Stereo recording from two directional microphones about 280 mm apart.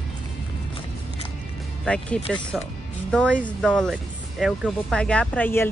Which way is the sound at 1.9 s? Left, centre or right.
Centre.